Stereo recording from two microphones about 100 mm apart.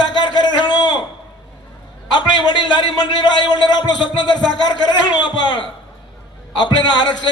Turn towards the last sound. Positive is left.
turn(degrees=45)  # may be behind; listen again after turning